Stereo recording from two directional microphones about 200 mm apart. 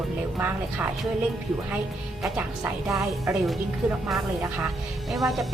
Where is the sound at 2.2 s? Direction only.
5° right (ahead or behind).